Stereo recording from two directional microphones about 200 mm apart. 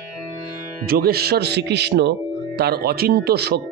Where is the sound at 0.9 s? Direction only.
50° right (ahead or behind).